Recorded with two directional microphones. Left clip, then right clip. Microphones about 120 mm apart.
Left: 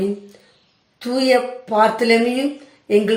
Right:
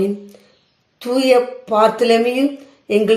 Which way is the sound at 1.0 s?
35° right (ahead or behind).